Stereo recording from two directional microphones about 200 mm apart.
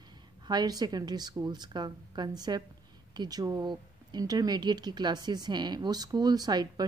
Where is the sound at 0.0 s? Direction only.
20° right (ahead or behind).